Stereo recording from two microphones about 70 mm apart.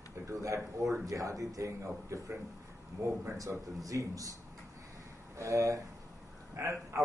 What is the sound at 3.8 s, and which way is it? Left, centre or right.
Speech, right.